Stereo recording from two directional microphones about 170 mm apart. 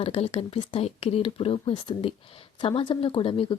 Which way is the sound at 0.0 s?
35° left (ahead or behind).